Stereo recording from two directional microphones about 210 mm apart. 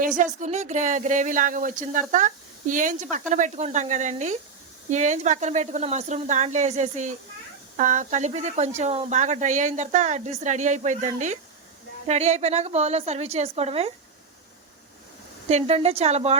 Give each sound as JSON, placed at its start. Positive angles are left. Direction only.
{"t": 0.2, "sound": "speech", "side_deg": -35}
{"t": 15.4, "sound": "a woman's voice", "side_deg": -30}